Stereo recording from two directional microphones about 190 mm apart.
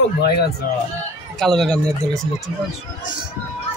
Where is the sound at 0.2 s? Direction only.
55° left (ahead or behind).